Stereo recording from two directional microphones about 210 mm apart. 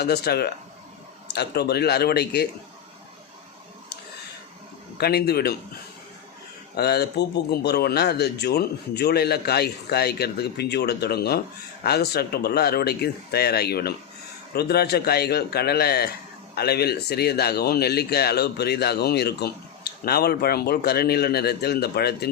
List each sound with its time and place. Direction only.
0.0 s a man's voice: 50° left (ahead or behind)
4.9 s a man's voice: 50° left (ahead or behind)
6.7 s a man's voice: 50° left (ahead or behind)